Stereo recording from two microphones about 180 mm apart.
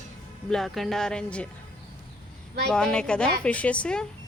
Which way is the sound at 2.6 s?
5° left (ahead or behind).